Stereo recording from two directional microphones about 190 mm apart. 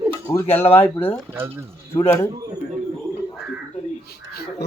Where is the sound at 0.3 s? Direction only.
15° left (ahead or behind).